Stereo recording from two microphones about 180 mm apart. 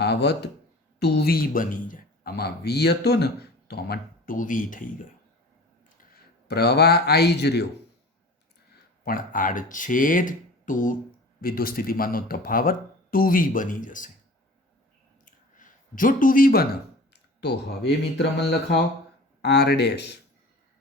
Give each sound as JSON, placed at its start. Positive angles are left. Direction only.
{"t": 0.0, "sound": "speech", "side_deg": 65}
{"t": 6.5, "sound": "speech", "side_deg": 65}
{"t": 9.0, "sound": "speech", "side_deg": 50}
{"t": 15.2, "sound": "speech", "side_deg": 45}